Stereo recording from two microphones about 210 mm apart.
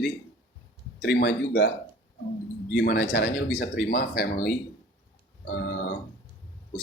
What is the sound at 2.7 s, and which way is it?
Speech, 50° left (ahead or behind).